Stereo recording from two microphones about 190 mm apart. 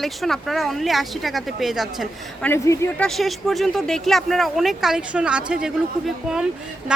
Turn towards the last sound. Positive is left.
turn(degrees=-5)  # may be behind; listen again after turning